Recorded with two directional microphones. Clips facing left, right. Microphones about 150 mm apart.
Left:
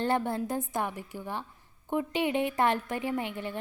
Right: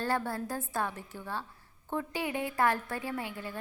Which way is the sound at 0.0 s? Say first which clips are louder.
Left 4 dB; 20° left (ahead or behind).